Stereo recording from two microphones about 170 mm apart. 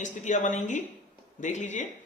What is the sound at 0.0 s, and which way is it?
Speech, 45° left (ahead or behind).